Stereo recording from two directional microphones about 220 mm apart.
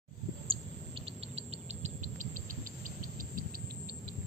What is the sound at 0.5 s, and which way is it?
Cricket, 25° right (ahead or behind).